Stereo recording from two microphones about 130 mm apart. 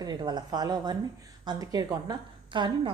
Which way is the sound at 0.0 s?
30° right (ahead or behind).